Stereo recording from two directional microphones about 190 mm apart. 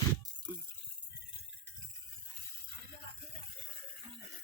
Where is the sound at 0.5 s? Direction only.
10° right (ahead or behind).